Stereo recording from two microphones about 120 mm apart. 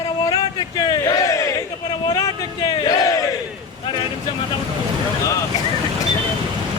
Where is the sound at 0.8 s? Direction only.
35° left (ahead or behind).